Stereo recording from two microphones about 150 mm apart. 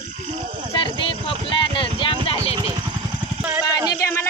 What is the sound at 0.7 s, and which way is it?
Speech, 35° left (ahead or behind).